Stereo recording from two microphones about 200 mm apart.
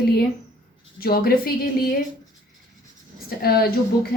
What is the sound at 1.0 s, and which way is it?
Speech, 50° left (ahead or behind).